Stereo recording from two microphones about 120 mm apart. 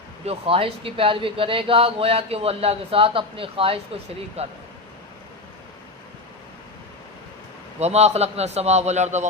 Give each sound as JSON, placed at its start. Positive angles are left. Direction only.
{"t": 0.3, "sound": "speech", "side_deg": -50}
{"t": 4.4, "sound": "a man's voice", "side_deg": -60}
{"t": 7.8, "sound": "a man's voice", "side_deg": -65}